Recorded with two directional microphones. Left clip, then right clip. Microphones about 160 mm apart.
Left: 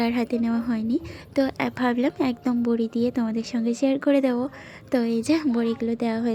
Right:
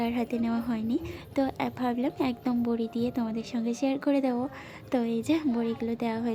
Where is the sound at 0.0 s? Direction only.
25° left (ahead or behind).